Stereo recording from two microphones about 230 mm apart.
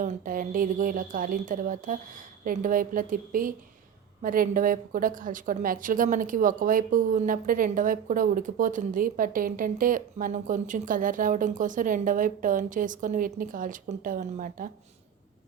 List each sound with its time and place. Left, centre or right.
0.0 s a woman's voice: right